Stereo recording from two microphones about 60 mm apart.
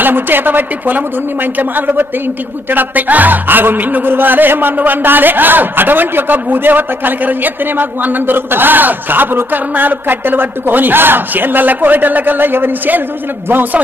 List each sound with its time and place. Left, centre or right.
0.0 s speech: right